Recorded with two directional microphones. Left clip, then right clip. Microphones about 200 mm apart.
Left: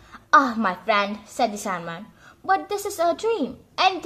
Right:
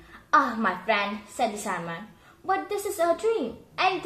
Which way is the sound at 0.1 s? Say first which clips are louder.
Left 5 dB; 35° left (ahead or behind).